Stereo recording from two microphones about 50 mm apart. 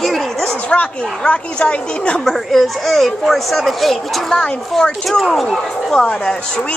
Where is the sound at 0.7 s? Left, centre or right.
Left.